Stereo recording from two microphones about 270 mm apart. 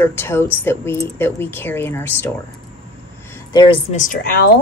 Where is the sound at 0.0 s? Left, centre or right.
Centre.